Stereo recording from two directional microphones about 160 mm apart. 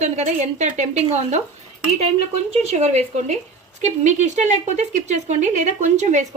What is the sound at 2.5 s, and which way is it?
Speech, 45° right (ahead or behind).